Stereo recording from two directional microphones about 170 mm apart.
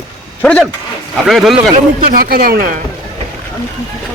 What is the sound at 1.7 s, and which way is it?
A man's voice, 55° right (ahead or behind).